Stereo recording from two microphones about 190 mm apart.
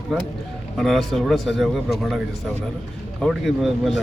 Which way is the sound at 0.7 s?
Centre (ahead or behind).